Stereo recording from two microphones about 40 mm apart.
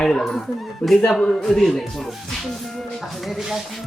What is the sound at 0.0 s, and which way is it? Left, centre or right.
A woman's voice, centre.